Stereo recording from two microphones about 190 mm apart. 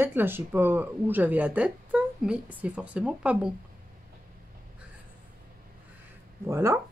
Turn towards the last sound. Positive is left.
turn(degrees=-15)  # may be behind; listen again after turning